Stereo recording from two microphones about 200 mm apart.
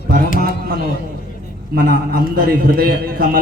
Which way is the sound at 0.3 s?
45° right (ahead or behind).